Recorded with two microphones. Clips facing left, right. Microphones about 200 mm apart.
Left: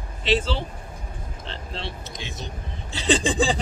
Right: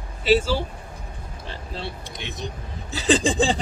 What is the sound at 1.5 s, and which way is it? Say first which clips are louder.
Speech: right 1 dB; 5° right (ahead or behind).